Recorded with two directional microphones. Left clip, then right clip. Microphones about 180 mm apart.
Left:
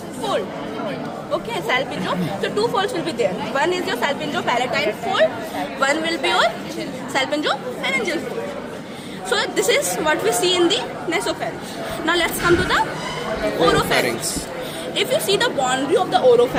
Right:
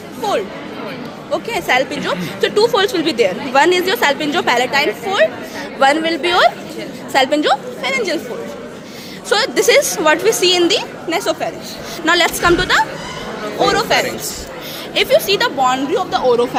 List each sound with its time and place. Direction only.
1.3 s a woman's voice: 40° right (ahead or behind)
9.3 s speech: 45° right (ahead or behind)
12.0 s speech: 55° right (ahead or behind)